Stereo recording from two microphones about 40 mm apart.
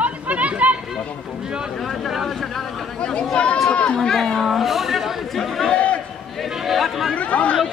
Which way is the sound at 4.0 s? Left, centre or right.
Centre.